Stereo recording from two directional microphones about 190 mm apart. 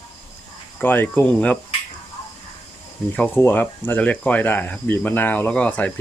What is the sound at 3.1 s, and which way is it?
Speech, 10° left (ahead or behind).